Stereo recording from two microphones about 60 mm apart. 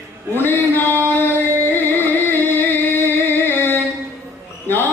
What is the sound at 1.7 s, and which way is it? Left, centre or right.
Music, left.